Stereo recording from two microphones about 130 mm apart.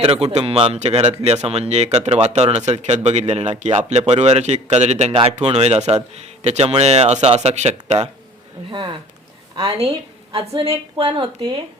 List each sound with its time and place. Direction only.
0.0 s a man's voice: 50° right (ahead or behind)
8.7 s a woman's voice: 40° right (ahead or behind)